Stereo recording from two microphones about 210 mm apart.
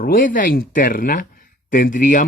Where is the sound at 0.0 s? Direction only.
40° left (ahead or behind).